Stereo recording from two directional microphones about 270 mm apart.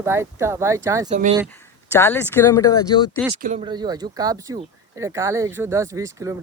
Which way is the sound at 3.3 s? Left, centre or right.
Right.